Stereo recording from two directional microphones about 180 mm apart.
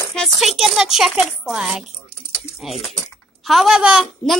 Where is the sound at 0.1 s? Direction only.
Centre (ahead or behind).